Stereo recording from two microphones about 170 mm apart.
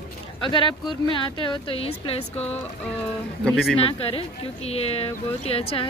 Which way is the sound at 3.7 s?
35° left (ahead or behind).